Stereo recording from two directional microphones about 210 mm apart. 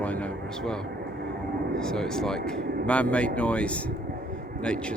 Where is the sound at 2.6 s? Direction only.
50° right (ahead or behind).